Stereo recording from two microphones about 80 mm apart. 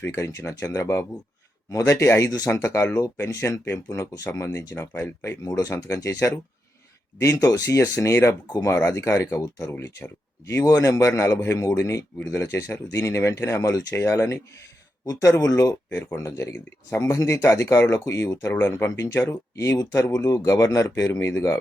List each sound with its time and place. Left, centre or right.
0.1 s speech: left
7.4 s speech: left
9.7 s speech: left
10.6 s speech: left
21.1 s speech: left